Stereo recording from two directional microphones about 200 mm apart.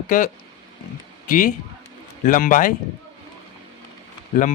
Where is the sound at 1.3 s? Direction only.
45° left (ahead or behind).